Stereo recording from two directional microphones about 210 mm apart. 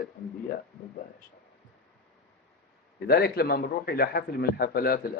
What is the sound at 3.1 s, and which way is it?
A man's voice, 45° left (ahead or behind).